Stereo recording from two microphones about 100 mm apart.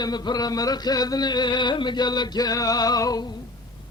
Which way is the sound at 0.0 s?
45° left (ahead or behind).